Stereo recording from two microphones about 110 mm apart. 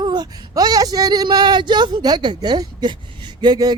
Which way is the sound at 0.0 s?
40° right (ahead or behind).